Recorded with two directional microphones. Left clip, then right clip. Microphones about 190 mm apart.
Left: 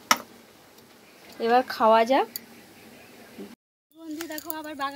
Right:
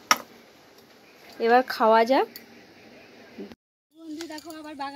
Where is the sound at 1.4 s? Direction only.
10° right (ahead or behind).